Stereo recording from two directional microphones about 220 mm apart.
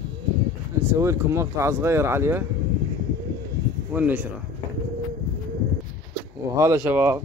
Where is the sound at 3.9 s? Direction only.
5° right (ahead or behind).